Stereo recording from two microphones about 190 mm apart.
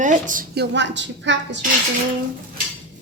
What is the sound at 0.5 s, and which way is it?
A woman's voice, 65° right (ahead or behind).